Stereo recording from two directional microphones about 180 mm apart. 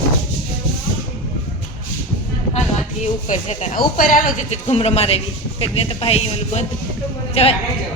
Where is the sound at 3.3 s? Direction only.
45° left (ahead or behind).